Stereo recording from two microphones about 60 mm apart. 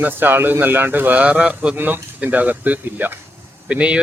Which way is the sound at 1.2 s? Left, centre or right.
Right.